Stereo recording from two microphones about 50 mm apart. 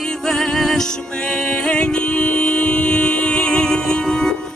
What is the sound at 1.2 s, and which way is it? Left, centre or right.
Music, left.